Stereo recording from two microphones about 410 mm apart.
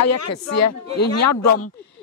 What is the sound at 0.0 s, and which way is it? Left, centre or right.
A man's voice, left.